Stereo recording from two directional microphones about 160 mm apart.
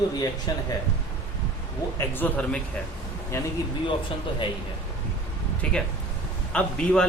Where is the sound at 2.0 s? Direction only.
10° left (ahead or behind).